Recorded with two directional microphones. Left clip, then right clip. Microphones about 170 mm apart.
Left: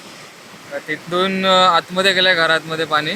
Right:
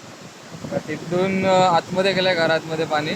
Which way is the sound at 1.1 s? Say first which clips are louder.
Left 3 dB; centre (ahead or behind).